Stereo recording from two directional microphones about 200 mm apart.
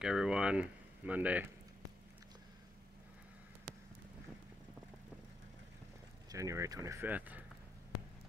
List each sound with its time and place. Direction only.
0.0 s speech: 5° right (ahead or behind)
6.3 s speech: 15° right (ahead or behind)